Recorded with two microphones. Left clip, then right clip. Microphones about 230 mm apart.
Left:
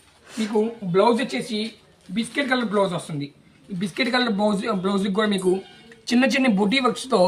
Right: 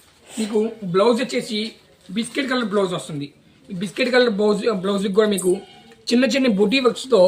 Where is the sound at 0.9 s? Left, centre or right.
Centre.